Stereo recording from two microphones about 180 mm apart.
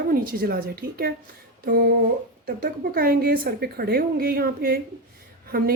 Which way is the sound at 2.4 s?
55° right (ahead or behind).